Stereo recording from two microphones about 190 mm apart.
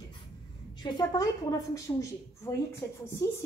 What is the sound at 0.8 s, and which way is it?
A woman's voice, 20° left (ahead or behind).